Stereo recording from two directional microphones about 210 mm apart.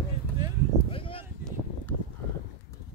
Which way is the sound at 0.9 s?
25° left (ahead or behind).